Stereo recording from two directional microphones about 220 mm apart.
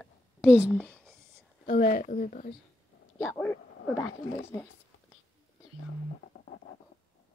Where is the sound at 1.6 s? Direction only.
40° left (ahead or behind).